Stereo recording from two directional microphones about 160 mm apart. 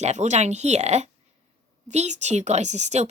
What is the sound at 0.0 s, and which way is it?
A woman's voice, 45° right (ahead or behind).